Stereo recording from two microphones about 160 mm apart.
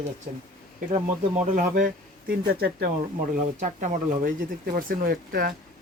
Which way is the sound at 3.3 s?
55° right (ahead or behind).